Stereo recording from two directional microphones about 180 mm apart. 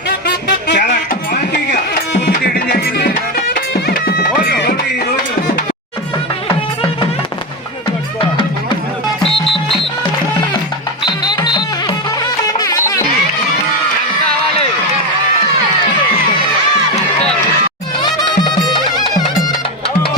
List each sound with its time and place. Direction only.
0.3 s music: 70° left (ahead or behind)
9.3 s music: centre (ahead or behind)
11.0 s music: 25° left (ahead or behind)
18.0 s music: 25° left (ahead or behind)